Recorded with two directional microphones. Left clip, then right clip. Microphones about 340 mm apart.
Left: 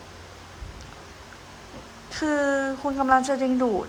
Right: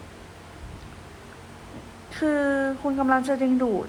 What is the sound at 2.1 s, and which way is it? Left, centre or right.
A woman's voice, centre.